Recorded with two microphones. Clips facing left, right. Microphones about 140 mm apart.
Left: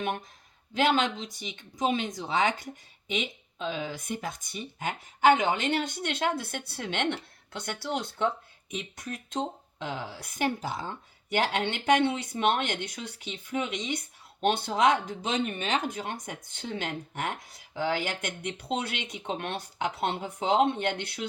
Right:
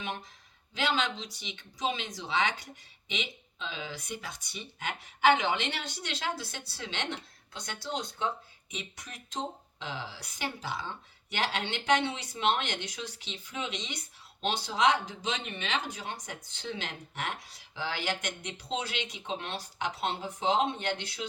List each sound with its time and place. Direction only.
0.7 s speech: 50° left (ahead or behind)
8.7 s speech: 50° left (ahead or behind)